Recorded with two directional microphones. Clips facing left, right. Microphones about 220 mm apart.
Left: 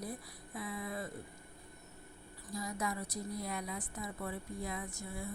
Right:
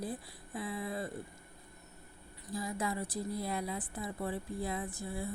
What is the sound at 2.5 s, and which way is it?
A woman's voice, 30° right (ahead or behind).